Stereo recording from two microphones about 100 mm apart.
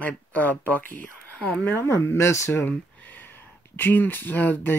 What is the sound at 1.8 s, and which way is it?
Speech, 25° left (ahead or behind).